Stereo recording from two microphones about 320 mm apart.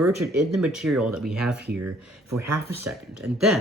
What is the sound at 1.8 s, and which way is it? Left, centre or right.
Speech, right.